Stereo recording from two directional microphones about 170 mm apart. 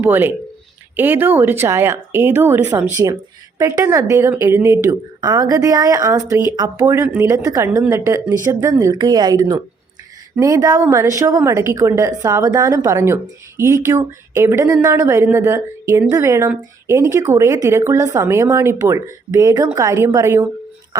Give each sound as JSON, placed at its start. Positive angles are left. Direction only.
{"t": 0.0, "sound": "a woman's voice", "side_deg": -10}